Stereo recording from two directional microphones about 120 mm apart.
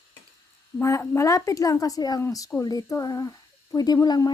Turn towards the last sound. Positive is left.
turn(degrees=35)  # may be behind; listen again after turning